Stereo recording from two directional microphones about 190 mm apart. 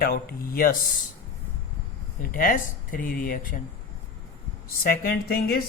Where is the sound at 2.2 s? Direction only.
50° left (ahead or behind).